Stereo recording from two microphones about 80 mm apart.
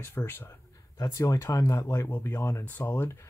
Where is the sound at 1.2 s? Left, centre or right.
Left.